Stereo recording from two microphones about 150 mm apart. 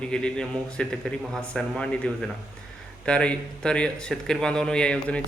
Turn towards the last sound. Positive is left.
turn(degrees=5)  # may be behind; listen again after turning